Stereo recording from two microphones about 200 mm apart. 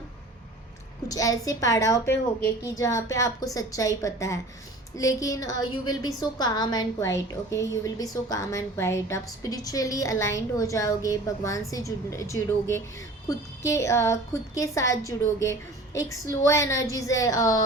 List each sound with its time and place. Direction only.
1.0 s a woman's voice: 15° left (ahead or behind)